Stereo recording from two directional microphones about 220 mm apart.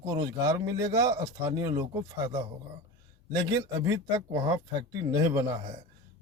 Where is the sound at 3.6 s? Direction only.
15° right (ahead or behind).